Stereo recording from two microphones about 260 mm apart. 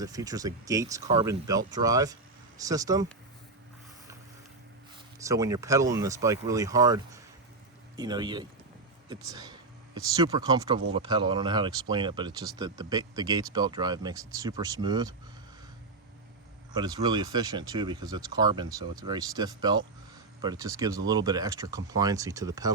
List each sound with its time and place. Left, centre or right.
0.0 s speech: centre
5.2 s speech: centre
16.7 s speech: centre